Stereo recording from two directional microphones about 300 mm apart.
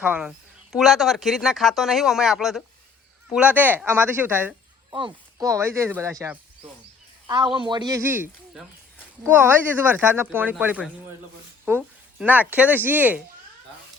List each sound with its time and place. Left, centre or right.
0.0 s speech: centre